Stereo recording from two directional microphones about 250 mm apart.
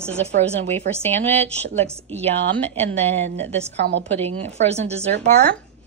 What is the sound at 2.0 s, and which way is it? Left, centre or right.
Speech, right.